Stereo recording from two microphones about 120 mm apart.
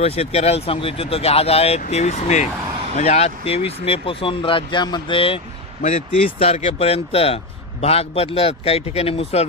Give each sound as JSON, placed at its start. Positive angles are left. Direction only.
{"t": 0.0, "sound": "speech", "side_deg": 55}
{"t": 5.8, "sound": "speech", "side_deg": 75}
{"t": 6.2, "sound": "speech", "side_deg": 55}